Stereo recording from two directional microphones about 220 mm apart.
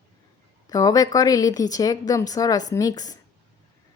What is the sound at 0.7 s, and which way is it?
A woman's voice, 15° left (ahead or behind).